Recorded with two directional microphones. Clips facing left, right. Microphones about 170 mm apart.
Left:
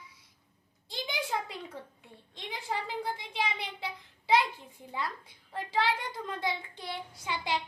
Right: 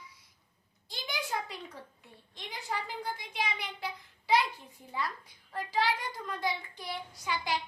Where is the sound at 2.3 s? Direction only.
25° left (ahead or behind).